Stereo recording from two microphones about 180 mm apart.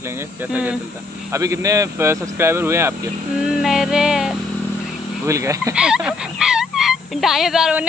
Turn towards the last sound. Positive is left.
turn(degrees=-5)  # may be behind; listen again after turning